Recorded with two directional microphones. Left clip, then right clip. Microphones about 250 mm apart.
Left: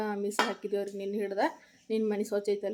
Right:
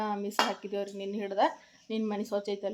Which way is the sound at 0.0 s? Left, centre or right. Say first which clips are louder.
Even; centre.